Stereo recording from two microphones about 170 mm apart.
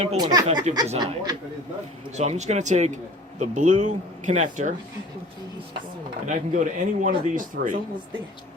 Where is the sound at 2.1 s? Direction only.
40° right (ahead or behind).